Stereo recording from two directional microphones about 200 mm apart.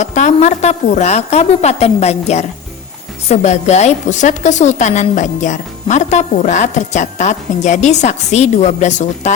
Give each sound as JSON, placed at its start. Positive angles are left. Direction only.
{"t": 0.0, "sound": "a woman's voice", "side_deg": 35}